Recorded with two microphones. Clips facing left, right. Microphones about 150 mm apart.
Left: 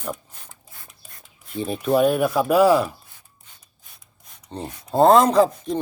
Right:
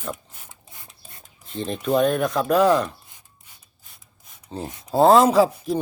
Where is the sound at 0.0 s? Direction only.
5° right (ahead or behind).